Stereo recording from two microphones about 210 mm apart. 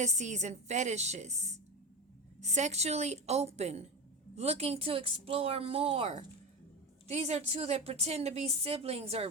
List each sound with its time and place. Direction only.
0.0 s a woman's voice: 35° right (ahead or behind)